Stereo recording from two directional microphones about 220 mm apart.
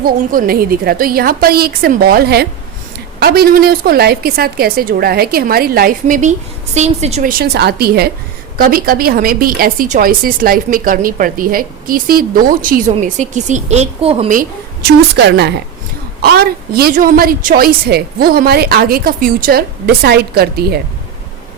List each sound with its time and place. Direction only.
0.0 s a woman's voice: 40° right (ahead or behind)
14.3 s a woman's voice: 45° right (ahead or behind)